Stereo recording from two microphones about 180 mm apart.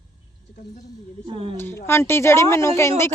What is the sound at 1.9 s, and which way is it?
Speech, 15° left (ahead or behind).